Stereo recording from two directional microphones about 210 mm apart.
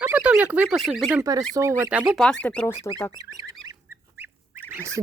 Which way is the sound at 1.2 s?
15° right (ahead or behind).